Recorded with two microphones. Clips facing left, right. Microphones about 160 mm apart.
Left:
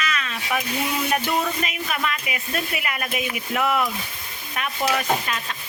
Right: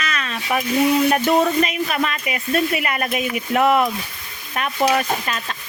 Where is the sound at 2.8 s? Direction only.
45° right (ahead or behind).